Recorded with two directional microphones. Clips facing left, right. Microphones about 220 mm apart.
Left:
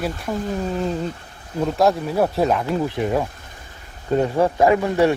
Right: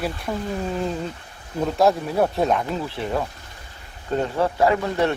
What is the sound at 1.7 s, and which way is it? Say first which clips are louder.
Speech: even; centre (ahead or behind).